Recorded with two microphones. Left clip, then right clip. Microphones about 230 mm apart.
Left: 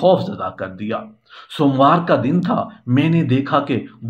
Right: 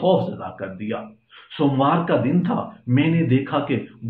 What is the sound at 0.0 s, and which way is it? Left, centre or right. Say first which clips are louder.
Speech: left 4 dB; left.